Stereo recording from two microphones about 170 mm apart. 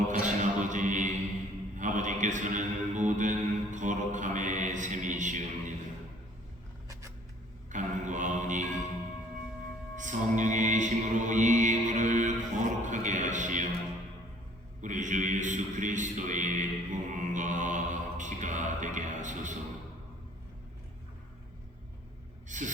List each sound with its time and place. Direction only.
0.1 s music: 45° right (ahead or behind)
1.8 s mantra: 45° right (ahead or behind)
7.7 s mantra: 45° right (ahead or behind)
10.0 s music: 45° right (ahead or behind)
14.8 s a sound: 45° right (ahead or behind)
22.4 s gasp: 45° right (ahead or behind)